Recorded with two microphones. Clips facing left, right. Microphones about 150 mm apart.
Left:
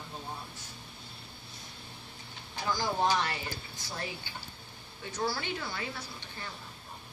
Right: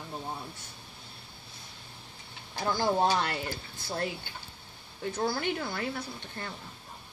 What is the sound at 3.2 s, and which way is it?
Speech, 60° right (ahead or behind).